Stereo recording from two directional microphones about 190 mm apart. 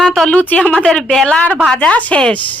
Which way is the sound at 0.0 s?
Centre (ahead or behind).